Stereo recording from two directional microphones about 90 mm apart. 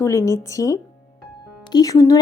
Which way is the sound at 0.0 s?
30° left (ahead or behind).